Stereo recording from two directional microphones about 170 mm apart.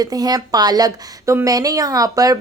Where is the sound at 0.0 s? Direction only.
20° right (ahead or behind).